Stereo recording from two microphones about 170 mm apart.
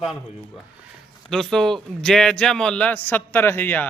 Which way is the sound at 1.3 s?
5° left (ahead or behind).